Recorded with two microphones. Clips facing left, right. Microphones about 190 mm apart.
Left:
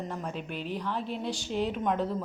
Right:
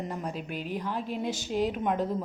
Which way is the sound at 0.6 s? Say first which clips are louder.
Even; 45° right (ahead or behind).